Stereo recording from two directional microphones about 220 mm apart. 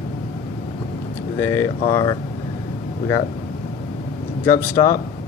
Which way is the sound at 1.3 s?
10° left (ahead or behind).